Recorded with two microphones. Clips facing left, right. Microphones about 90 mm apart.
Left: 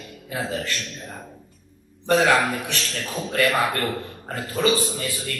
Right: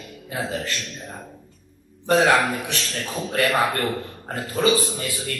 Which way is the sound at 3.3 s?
35° right (ahead or behind).